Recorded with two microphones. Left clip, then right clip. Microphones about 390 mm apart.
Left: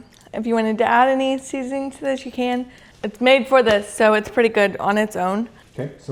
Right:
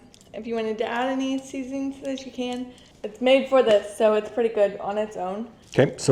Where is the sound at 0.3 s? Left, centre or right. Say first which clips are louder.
Left 7 dB; left.